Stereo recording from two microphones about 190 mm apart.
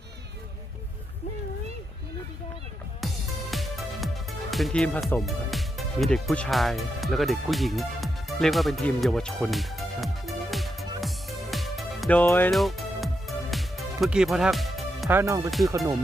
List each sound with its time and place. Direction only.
3.0 s music: centre (ahead or behind)
12.5 s music: centre (ahead or behind)
15.1 s speech: 15° right (ahead or behind)
15.4 s speech: centre (ahead or behind)